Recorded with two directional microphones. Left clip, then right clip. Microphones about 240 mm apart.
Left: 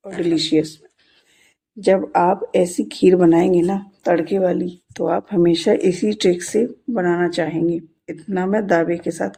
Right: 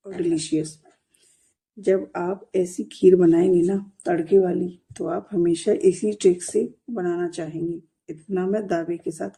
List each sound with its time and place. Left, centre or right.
0.0 s speech: centre
1.8 s speech: centre
6.5 s speech: left
6.9 s speech: centre